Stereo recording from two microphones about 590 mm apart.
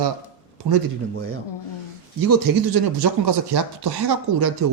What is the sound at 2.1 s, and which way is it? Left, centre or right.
Speech, right.